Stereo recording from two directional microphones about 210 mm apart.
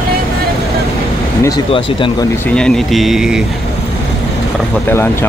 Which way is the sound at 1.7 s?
25° left (ahead or behind).